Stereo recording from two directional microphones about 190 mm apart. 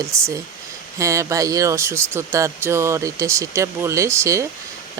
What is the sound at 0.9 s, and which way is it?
Speech, 15° right (ahead or behind).